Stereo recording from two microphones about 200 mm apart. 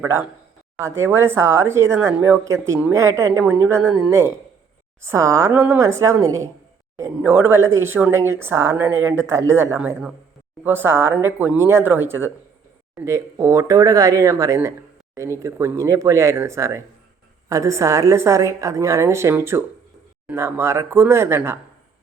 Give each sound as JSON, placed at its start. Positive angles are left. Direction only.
{"t": 0.0, "sound": "speech", "side_deg": -10}